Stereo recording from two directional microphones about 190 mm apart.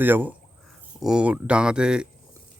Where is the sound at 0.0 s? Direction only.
10° right (ahead or behind).